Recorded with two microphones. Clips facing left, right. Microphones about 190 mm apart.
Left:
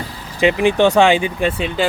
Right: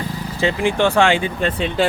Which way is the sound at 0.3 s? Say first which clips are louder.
Left 4 dB; 15° left (ahead or behind).